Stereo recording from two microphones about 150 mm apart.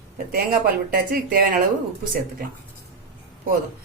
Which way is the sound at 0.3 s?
80° right.